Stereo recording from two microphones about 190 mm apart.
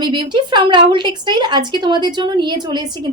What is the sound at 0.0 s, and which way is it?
A woman's voice, 25° right (ahead or behind).